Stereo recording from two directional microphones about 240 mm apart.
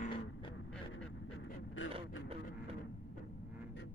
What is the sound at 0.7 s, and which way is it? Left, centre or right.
Dog, centre.